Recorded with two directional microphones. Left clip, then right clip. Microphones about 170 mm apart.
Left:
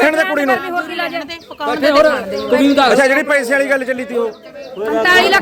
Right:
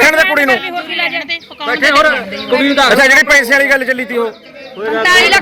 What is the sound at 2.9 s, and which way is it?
A man's voice, centre (ahead or behind).